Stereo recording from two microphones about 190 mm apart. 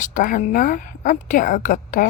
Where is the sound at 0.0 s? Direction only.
45° left (ahead or behind).